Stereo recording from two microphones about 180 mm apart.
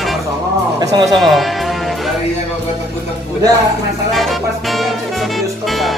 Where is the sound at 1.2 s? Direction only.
Centre (ahead or behind).